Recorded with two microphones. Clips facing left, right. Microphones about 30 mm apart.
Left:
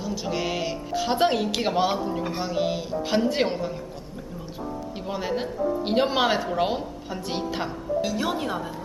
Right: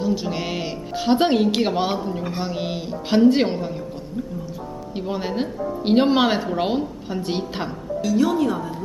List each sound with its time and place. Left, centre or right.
0.0 s a woman's voice: centre
4.9 s speech: centre
8.2 s speech: centre